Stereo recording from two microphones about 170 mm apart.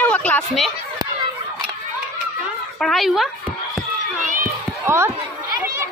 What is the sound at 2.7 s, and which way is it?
Speech, centre (ahead or behind).